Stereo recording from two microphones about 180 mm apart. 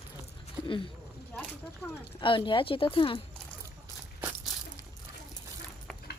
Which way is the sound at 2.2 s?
30° left (ahead or behind).